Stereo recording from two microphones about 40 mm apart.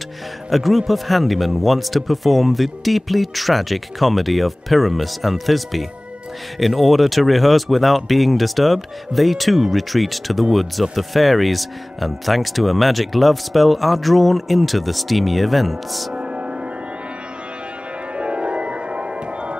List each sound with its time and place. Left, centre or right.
0.5 s speech: centre
16.2 s music: right
18.1 s music: right